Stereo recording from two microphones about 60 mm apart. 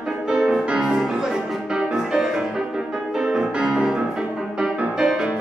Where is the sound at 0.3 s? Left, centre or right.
Centre.